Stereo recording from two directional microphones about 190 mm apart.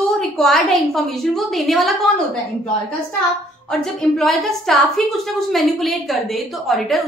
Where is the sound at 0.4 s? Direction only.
Centre (ahead or behind).